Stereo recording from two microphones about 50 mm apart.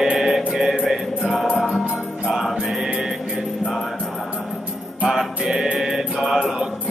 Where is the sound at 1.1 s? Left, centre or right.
Centre.